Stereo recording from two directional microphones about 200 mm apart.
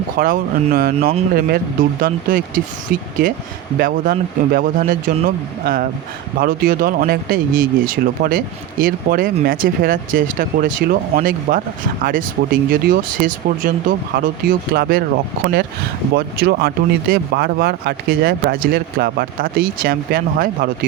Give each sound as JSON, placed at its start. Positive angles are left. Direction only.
{"t": 0.2, "sound": "speech", "side_deg": -45}
{"t": 3.8, "sound": "speech", "side_deg": -45}
{"t": 16.1, "sound": "speech", "side_deg": -50}